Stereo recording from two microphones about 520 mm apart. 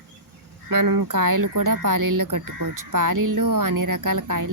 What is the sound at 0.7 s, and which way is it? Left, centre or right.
Speech, right.